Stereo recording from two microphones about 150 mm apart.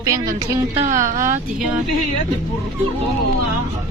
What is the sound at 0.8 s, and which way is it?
Speech, 60° right (ahead or behind).